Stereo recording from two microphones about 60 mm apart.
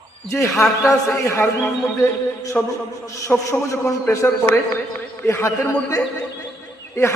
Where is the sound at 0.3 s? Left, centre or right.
Left.